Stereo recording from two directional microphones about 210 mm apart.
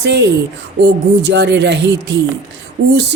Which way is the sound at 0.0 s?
55° right (ahead or behind).